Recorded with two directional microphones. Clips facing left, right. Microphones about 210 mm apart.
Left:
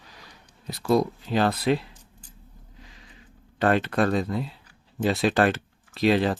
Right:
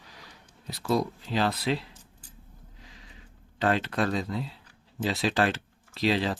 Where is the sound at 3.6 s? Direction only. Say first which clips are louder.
Left 4 dB; 55° left (ahead or behind).